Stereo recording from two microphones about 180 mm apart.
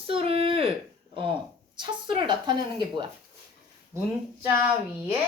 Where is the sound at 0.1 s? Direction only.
30° right (ahead or behind).